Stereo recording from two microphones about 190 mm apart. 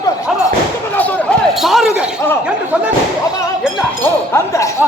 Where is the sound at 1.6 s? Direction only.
Centre (ahead or behind).